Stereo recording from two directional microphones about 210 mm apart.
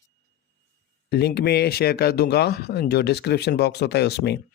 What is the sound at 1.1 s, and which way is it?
Speech, 50° left (ahead or behind).